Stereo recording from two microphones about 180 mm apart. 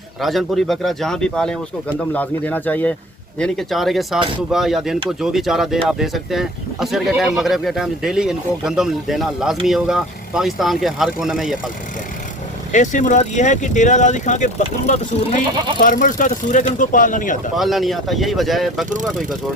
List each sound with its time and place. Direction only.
0.2 s speech: centre (ahead or behind)
12.7 s speech: 45° left (ahead or behind)
17.6 s speech: centre (ahead or behind)